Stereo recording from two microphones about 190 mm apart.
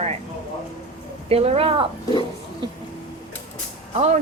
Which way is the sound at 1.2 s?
30° right (ahead or behind).